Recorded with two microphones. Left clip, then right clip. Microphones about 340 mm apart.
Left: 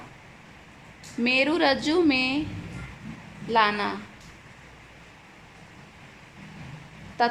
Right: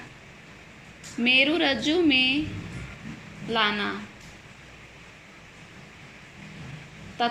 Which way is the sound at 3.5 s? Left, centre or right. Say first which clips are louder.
Left 3 dB; centre.